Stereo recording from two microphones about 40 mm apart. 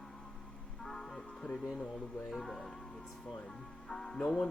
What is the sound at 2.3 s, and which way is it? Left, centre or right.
Speech, centre.